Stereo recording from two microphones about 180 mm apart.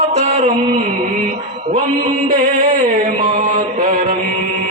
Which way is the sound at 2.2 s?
50° right (ahead or behind).